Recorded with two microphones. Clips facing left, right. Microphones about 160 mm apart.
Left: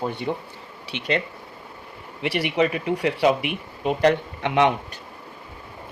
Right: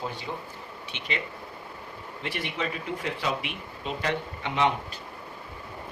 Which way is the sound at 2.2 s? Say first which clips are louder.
Left 11 dB; 80° left.